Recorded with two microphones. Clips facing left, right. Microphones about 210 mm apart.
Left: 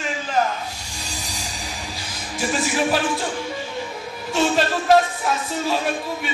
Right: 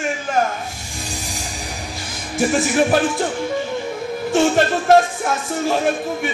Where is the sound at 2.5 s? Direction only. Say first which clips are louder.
Right 4 dB; 50° right (ahead or behind).